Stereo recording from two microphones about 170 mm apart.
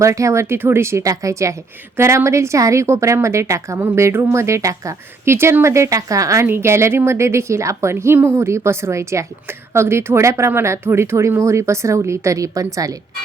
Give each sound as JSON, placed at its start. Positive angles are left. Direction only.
{"t": 0.0, "sound": "a woman's voice", "side_deg": -20}